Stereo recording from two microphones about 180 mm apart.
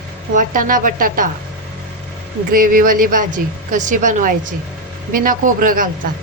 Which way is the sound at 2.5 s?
50° right (ahead or behind).